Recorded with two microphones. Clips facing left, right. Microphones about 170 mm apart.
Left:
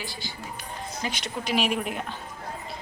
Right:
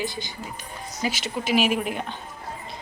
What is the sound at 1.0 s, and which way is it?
A woman's voice, 5° right (ahead or behind).